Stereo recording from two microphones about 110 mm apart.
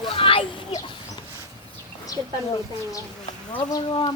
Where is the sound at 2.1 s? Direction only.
30° left (ahead or behind).